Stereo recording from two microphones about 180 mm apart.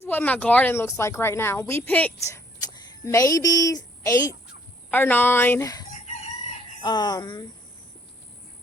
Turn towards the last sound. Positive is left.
turn(degrees=25)  # may be behind; listen again after turning